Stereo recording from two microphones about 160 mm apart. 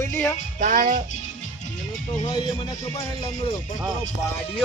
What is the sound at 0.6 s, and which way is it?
Music, 60° right (ahead or behind).